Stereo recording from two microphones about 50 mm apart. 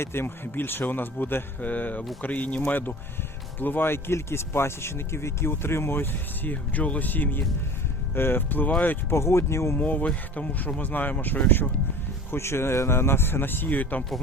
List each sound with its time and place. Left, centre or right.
0.0 s speech: left
1.6 s speech: left
3.6 s speech: left
6.5 s speech: left
9.0 s speech: left
9.7 s speech: left
12.3 s speech: left